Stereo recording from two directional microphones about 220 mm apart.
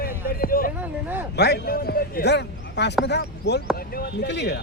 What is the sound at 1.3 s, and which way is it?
A man's voice, 50° left (ahead or behind).